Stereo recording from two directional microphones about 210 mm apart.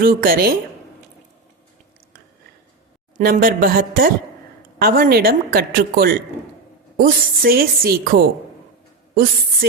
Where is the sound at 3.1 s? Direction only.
40° right (ahead or behind).